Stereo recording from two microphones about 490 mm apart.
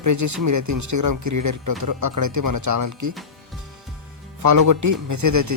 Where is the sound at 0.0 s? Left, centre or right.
Right.